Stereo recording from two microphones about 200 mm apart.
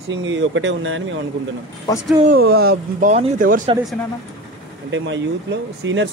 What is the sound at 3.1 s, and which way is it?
Speech, 40° right (ahead or behind).